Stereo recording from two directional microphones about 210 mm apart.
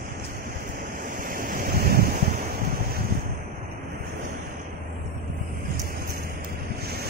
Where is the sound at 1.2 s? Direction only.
40° right (ahead or behind).